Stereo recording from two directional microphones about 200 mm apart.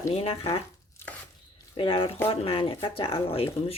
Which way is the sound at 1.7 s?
25° left (ahead or behind).